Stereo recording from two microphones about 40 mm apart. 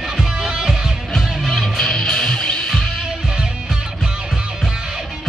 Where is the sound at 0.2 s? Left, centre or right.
Centre.